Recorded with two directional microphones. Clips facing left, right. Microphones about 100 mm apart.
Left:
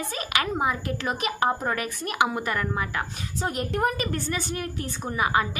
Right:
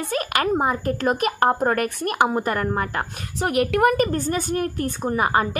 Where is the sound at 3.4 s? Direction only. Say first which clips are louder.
Right 7 dB; 90° right.